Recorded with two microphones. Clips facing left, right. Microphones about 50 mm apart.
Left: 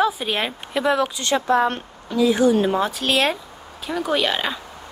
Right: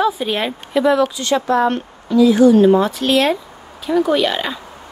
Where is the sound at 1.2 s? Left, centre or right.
Left.